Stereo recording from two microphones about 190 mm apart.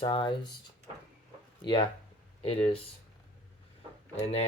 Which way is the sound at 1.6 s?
30° left (ahead or behind).